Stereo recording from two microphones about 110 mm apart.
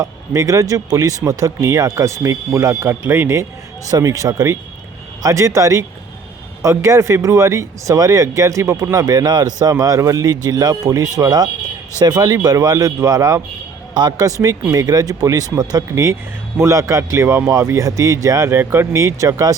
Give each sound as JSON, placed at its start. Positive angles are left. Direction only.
{"t": 0.0, "sound": "speech", "side_deg": -30}